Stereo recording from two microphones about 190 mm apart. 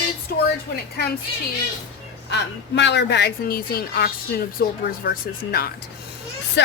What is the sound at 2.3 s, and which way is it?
A woman's voice, 65° left (ahead or behind).